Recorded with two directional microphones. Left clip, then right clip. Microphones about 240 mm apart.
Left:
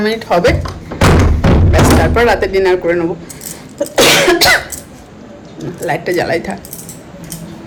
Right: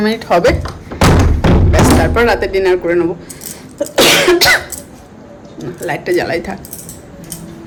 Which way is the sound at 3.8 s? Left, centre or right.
Centre.